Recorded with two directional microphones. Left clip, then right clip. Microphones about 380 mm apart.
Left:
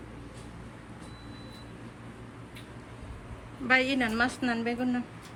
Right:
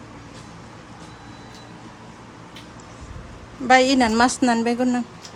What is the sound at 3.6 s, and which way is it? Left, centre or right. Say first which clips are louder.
Speech: right 10 dB; centre.